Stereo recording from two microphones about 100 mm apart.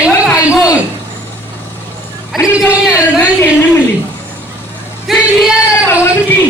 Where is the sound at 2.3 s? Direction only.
5° right (ahead or behind).